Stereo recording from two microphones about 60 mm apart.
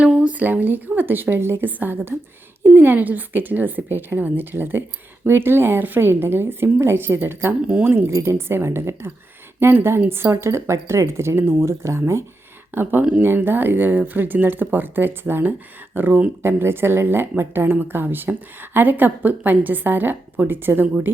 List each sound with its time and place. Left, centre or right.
0.0 s a woman's voice: right
8.1 s speech: right
12.7 s a woman's voice: right